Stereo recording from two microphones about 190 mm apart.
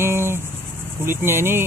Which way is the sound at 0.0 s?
10° right (ahead or behind).